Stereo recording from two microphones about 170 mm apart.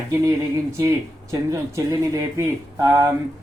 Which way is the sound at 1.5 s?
20° right (ahead or behind).